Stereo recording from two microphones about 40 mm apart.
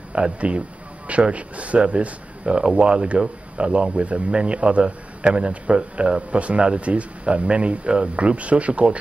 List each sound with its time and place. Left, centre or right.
0.1 s speech: right